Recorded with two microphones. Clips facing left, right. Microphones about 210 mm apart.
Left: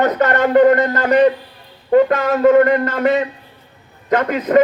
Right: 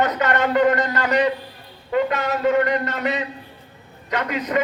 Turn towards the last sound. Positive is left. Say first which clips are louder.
# left 9 dB
turn(degrees=50)  # may be behind; listen again after turning